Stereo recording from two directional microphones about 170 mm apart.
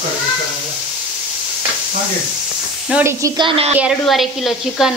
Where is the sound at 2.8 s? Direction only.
10° right (ahead or behind).